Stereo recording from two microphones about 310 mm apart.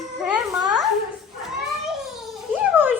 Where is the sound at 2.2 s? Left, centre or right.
Centre.